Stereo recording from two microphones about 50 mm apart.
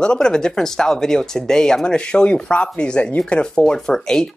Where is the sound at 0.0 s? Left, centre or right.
Centre.